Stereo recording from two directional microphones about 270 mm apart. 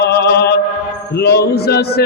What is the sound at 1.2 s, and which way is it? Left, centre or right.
Music, left.